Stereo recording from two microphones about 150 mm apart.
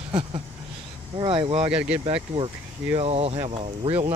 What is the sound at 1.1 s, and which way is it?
Speech, 35° right (ahead or behind).